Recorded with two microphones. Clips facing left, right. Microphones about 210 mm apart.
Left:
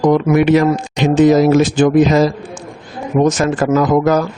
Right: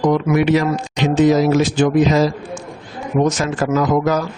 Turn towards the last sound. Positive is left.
turn(degrees=50)  # may be behind; listen again after turning